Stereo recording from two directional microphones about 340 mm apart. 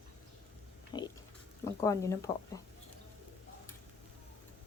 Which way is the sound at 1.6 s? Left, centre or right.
Centre.